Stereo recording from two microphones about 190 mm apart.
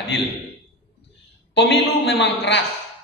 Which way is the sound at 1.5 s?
65° left (ahead or behind).